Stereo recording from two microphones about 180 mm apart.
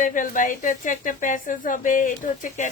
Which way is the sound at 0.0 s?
45° left (ahead or behind).